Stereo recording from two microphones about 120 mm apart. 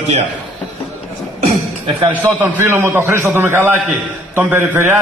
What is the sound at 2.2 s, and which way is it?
A man's voice, 15° right (ahead or behind).